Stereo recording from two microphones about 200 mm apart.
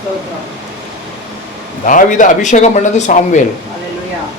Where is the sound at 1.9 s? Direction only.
40° left (ahead or behind).